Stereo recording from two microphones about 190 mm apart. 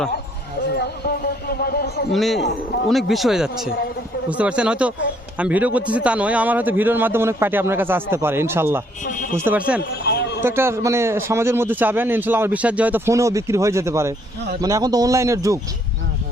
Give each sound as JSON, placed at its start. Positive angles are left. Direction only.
{"t": 1.0, "sound": "a man's voice", "side_deg": 55}
{"t": 2.1, "sound": "a man's voice", "side_deg": 0}
{"t": 10.1, "sound": "a sound", "side_deg": 60}
{"t": 10.4, "sound": "a man's voice", "side_deg": -15}